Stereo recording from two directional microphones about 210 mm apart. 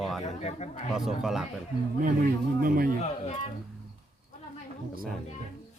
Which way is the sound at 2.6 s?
45° right (ahead or behind).